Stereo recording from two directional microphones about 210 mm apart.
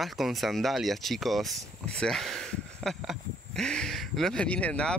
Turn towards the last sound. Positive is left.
turn(degrees=5)  # may be behind; listen again after turning